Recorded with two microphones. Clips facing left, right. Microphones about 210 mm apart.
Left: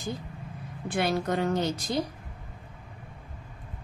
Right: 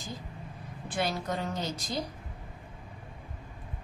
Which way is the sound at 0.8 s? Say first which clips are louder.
Left 5 dB; 60° left (ahead or behind).